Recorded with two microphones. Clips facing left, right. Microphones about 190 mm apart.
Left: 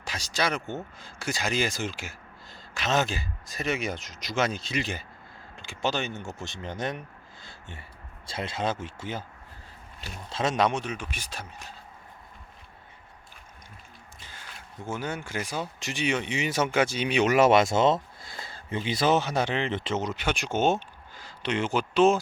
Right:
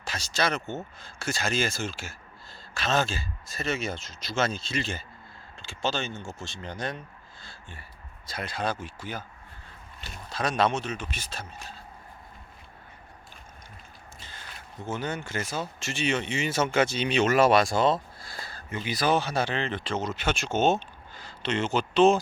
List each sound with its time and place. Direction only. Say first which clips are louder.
0.0 s speech: right 1 dB; 15° left (ahead or behind)
10.2 s speech: left 1 dB; 25° left (ahead or behind)
14.8 s speech: right 1 dB; 10° left (ahead or behind)